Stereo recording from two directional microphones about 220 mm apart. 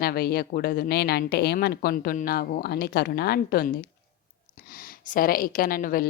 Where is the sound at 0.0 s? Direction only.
45° left (ahead or behind).